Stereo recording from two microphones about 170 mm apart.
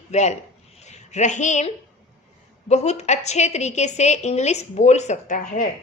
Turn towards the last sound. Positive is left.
turn(degrees=50)  # may be behind; listen again after turning